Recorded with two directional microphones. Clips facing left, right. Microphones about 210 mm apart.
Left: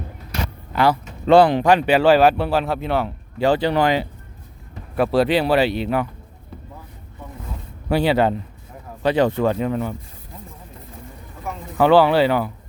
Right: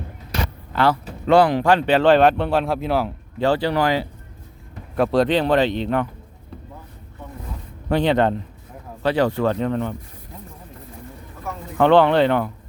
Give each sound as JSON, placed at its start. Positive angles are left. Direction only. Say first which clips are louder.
{"t": 0.7, "sound": "speech", "louder": "left 1 dB", "side_deg": 15}
{"t": 1.3, "sound": "speech", "louder": "left 2 dB", "side_deg": 30}
{"t": 1.6, "sound": "a man's voice", "louder": "left 1 dB", "side_deg": 10}
{"t": 3.4, "sound": "speech", "louder": "left 2 dB", "side_deg": 20}
{"t": 4.9, "sound": "speech", "louder": "even", "side_deg": 5}
{"t": 7.9, "sound": "speech", "louder": "even", "side_deg": 10}
{"t": 9.0, "sound": "speech", "louder": "left 1 dB", "side_deg": 20}
{"t": 11.5, "sound": "a man's voice", "louder": "even", "side_deg": 15}